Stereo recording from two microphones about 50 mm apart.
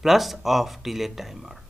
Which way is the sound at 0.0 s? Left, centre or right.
Centre.